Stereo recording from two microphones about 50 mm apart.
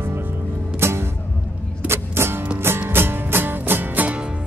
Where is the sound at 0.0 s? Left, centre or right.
Right.